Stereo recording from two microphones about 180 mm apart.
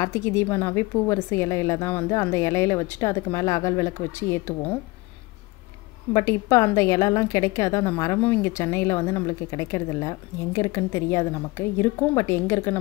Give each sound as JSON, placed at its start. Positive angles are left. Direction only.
{"t": 0.0, "sound": "a woman's voice", "side_deg": 15}
{"t": 6.1, "sound": "a woman's voice", "side_deg": 15}